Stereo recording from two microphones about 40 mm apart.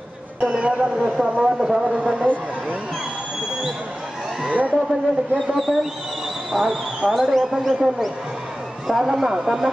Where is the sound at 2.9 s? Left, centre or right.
Centre.